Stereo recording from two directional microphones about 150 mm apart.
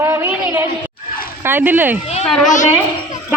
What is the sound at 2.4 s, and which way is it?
Speech, 55° left (ahead or behind).